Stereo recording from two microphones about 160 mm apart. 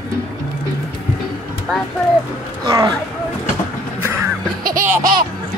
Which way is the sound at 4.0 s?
15° right (ahead or behind).